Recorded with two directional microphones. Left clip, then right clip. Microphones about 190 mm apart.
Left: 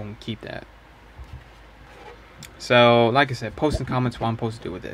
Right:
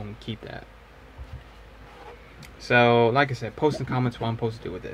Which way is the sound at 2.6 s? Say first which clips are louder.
Left 3 dB; 30° left (ahead or behind).